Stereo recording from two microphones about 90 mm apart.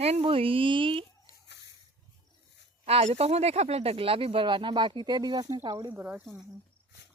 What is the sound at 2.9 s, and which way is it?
Speech, 90° right.